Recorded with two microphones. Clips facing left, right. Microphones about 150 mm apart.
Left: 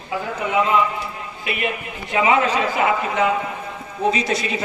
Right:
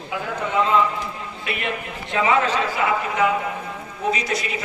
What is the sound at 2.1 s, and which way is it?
A man's voice, 15° left (ahead or behind).